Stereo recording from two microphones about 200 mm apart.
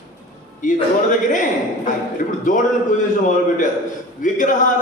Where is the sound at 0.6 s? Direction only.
40° left (ahead or behind).